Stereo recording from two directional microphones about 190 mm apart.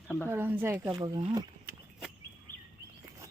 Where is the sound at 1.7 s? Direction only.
55° right (ahead or behind).